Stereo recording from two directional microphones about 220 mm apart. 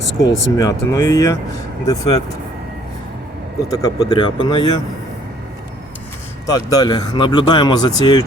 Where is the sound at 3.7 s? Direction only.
15° left (ahead or behind).